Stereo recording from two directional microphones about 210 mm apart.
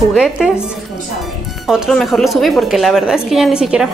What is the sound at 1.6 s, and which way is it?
A woman's voice, centre (ahead or behind).